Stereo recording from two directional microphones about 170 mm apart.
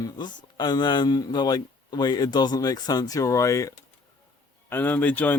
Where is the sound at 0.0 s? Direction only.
25° left (ahead or behind).